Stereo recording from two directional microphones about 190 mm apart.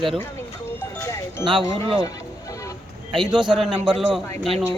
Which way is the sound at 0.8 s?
15° left (ahead or behind).